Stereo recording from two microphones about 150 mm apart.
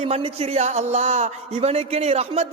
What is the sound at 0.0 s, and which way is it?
A man's voice, 40° right (ahead or behind).